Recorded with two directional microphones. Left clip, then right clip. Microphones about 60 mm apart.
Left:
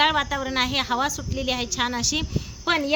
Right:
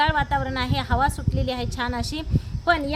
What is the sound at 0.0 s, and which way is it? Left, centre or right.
A woman's voice, right.